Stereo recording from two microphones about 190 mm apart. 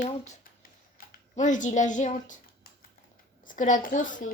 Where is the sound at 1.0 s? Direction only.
50° left (ahead or behind).